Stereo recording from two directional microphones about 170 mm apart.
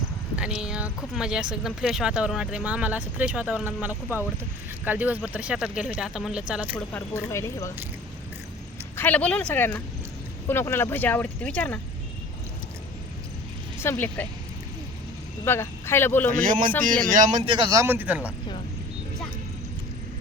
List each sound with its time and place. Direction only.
0.3 s speech: 5° right (ahead or behind)
6.9 s speech: 15° left (ahead or behind)
9.0 s speech: 10° left (ahead or behind)
13.7 s speech: 15° left (ahead or behind)
15.4 s a man's voice: 15° left (ahead or behind)
16.8 s speech: 50° right (ahead or behind)
17.7 s speech: 15° right (ahead or behind)